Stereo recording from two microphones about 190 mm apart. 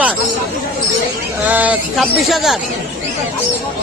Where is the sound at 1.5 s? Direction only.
10° right (ahead or behind).